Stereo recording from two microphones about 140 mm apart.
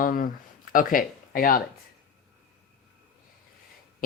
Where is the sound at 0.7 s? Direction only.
85° left.